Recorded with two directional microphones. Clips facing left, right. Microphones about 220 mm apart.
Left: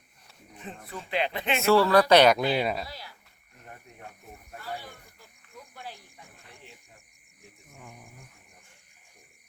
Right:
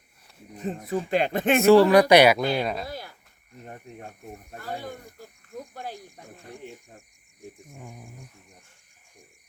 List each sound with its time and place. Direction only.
0.5 s a sound: 40° right (ahead or behind)
0.9 s speech: 45° right (ahead or behind)
1.6 s speech: 15° right (ahead or behind)
2.4 s speech: 5° left (ahead or behind)
2.8 s a sound: 50° right (ahead or behind)
4.5 s speech: 50° right (ahead or behind)
7.7 s speech: 15° right (ahead or behind)